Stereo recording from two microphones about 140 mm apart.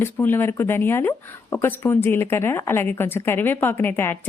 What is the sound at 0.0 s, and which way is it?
Speech, 15° left (ahead or behind).